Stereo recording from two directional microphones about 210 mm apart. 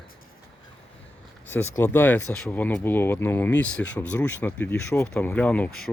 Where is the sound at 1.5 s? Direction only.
10° left (ahead or behind).